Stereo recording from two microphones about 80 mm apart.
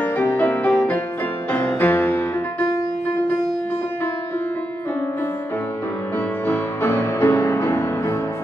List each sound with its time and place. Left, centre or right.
0.0 s music: left
6.4 s music: left